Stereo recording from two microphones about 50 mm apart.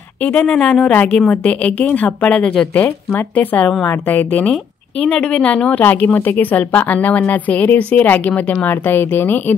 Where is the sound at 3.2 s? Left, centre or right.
Left.